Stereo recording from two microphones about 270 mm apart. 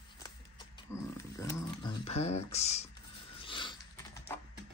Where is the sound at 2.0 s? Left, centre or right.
Left.